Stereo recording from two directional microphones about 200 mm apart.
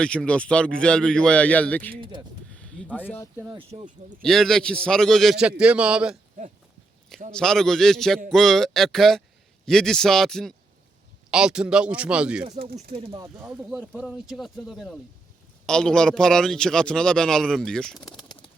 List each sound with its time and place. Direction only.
0.0 s a man's voice: 5° left (ahead or behind)
2.5 s a sound: 5° left (ahead or behind)
3.5 s speech: 30° right (ahead or behind)
4.2 s a man's voice: centre (ahead or behind)
7.3 s a man's voice: 5° left (ahead or behind)
12.9 s speech: 30° right (ahead or behind)
13.4 s a man's voice: 5° right (ahead or behind)
18.0 s bird: 20° left (ahead or behind)